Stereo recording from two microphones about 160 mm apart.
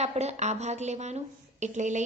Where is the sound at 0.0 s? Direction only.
40° right (ahead or behind).